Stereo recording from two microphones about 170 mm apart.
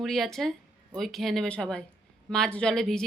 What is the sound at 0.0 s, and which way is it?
A woman's voice, centre (ahead or behind).